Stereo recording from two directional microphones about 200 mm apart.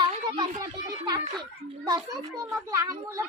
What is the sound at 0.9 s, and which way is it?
Speech, 20° right (ahead or behind).